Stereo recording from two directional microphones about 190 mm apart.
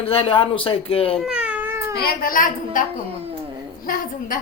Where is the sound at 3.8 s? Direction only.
45° left (ahead or behind).